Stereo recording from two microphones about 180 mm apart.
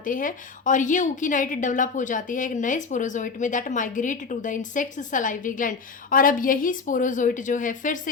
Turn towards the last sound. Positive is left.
turn(degrees=45)  # may be behind; listen again after turning